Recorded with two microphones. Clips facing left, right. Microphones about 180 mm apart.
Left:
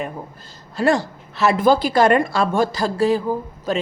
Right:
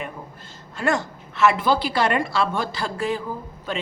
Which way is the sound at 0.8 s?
35° left (ahead or behind).